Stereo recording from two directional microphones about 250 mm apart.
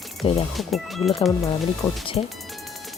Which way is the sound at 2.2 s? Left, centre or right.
Left.